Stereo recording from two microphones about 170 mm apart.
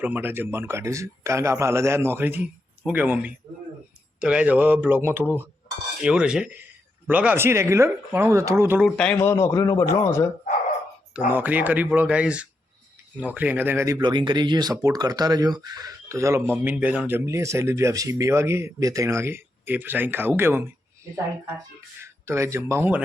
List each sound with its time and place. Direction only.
0.0 s speech: 10° right (ahead or behind)
9.1 s a man's voice: 15° left (ahead or behind)
11.3 s speech: 10° right (ahead or behind)
22.0 s speech: 15° right (ahead or behind)